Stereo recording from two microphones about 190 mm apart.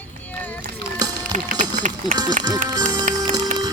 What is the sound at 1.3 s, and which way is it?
Run, 40° right (ahead or behind).